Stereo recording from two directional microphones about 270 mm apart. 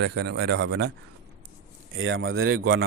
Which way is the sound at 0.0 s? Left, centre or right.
Right.